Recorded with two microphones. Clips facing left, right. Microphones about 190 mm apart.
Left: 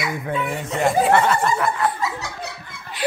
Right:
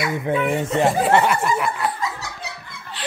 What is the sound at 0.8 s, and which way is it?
Speech, 15° right (ahead or behind).